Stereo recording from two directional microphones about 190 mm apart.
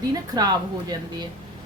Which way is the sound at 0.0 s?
20° right (ahead or behind).